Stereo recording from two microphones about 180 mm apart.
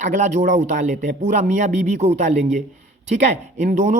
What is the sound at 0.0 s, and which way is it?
Speech, 45° right (ahead or behind).